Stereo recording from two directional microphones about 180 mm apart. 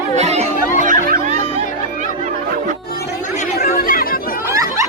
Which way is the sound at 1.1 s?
50° right (ahead or behind).